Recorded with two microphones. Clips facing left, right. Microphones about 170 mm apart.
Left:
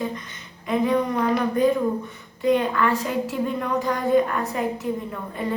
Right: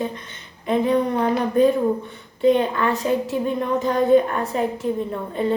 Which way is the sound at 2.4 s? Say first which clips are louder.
Right 3 dB; 25° right (ahead or behind).